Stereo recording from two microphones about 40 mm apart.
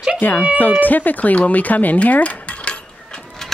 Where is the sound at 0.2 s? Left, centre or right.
Left.